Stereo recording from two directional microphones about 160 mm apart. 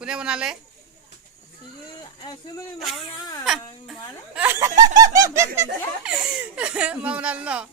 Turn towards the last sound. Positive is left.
turn(degrees=-5)  # may be behind; listen again after turning